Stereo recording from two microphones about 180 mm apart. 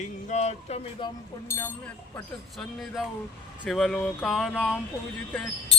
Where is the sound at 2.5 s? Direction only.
Centre (ahead or behind).